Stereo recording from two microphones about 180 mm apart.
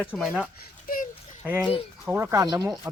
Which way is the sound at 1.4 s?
10° right (ahead or behind).